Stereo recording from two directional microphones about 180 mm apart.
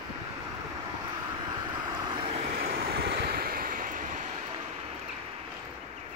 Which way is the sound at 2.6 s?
60° right (ahead or behind).